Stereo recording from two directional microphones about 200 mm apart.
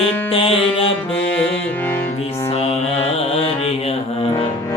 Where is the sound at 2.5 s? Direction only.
30° left (ahead or behind).